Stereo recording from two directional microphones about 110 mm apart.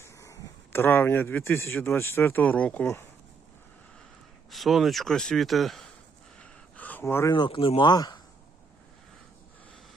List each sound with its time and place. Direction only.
0.0 s speech: 25° left (ahead or behind)
4.5 s speech: centre (ahead or behind)
6.4 s a sound: 15° left (ahead or behind)
7.0 s speech: 25° left (ahead or behind)
7.3 s speech: 50° left (ahead or behind)